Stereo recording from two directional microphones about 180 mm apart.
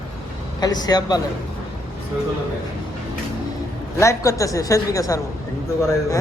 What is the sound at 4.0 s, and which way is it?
A man's voice, 15° left (ahead or behind).